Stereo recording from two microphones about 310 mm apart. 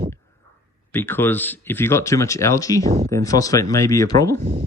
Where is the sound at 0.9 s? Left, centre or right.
Centre.